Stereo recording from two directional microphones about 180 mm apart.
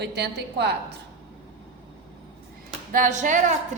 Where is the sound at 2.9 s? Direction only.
45° right (ahead or behind).